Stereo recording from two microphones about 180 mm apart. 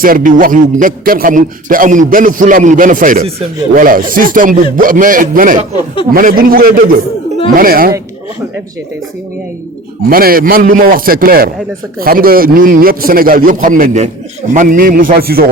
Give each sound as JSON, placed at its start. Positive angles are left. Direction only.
{"t": 0.0, "sound": "a man's voice", "side_deg": -50}
{"t": 10.1, "sound": "a man's voice", "side_deg": -55}